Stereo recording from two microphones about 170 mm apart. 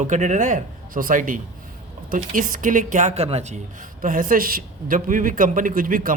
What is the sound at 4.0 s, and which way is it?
A man's voice, 55° right (ahead or behind).